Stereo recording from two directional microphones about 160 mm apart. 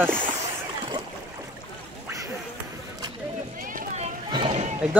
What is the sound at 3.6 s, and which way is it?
Vehicle, 50° right (ahead or behind).